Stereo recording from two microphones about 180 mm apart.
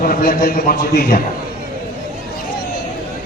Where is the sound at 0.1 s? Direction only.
55° left (ahead or behind).